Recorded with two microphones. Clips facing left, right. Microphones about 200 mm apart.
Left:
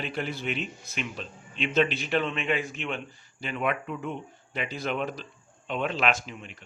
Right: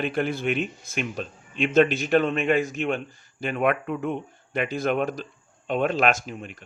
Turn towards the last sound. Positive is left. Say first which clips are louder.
# right 3 dB
turn(degrees=-45)  # may be behind; listen again after turning